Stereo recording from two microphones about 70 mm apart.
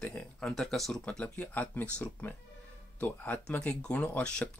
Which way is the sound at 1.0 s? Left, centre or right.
Centre.